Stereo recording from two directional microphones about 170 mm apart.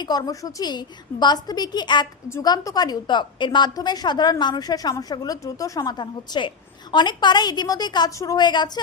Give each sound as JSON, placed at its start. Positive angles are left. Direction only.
{"t": 0.0, "sound": "a woman's voice", "side_deg": 25}